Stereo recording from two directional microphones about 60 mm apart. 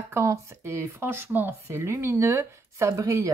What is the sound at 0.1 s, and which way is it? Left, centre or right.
Speech, right.